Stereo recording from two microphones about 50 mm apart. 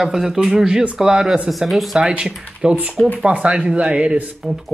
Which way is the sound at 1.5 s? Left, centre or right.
Centre.